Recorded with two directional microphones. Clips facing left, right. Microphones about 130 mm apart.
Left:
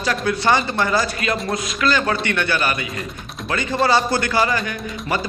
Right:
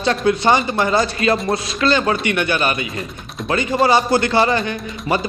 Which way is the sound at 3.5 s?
20° right (ahead or behind).